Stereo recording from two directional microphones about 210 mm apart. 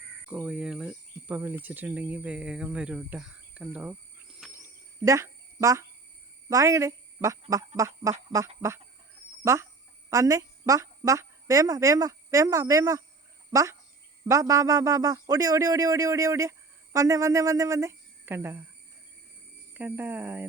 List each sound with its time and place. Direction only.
0.3 s speech: 5° right (ahead or behind)
5.0 s a man's voice: 15° right (ahead or behind)
19.7 s a man's voice: 10° right (ahead or behind)